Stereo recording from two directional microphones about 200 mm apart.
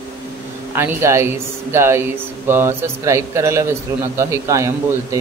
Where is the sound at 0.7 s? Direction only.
15° right (ahead or behind).